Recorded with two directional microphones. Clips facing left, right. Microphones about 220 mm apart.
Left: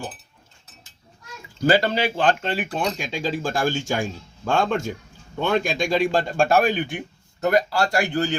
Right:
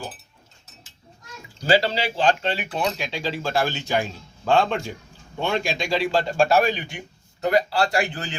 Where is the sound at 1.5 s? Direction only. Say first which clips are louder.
Left 1 dB; 50° left (ahead or behind).